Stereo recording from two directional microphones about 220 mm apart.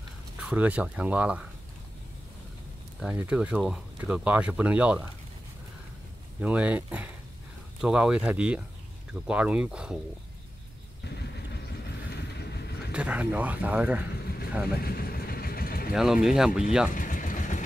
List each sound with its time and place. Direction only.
0.4 s speech: 5° right (ahead or behind)
3.0 s speech: 5° right (ahead or behind)
6.4 s speech: 5° right (ahead or behind)
12.1 s vehicle: 50° left (ahead or behind)
12.9 s speech: 5° right (ahead or behind)
14.8 s vehicle: 45° left (ahead or behind)
15.9 s speech: 5° right (ahead or behind)
16.9 s vehicle: 35° left (ahead or behind)